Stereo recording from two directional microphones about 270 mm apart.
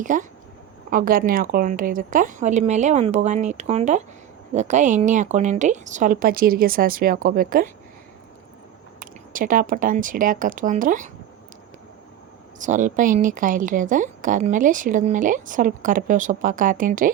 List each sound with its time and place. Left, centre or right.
0.0 s a woman's voice: right
9.0 s speech: right
12.5 s a woman's voice: right